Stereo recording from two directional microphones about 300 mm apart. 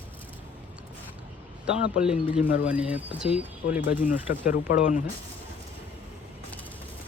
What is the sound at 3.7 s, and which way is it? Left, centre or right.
Speech, left.